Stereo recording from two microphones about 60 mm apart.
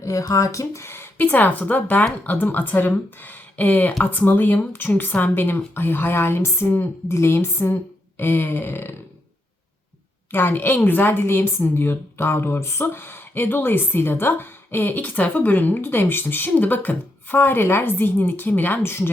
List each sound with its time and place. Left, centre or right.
0.0 s speech: left
0.9 s a woman's voice: left
10.3 s a woman's voice: left